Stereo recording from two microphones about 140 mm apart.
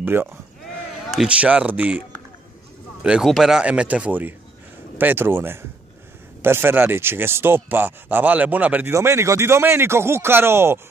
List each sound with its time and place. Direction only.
0.0 s speech: 15° right (ahead or behind)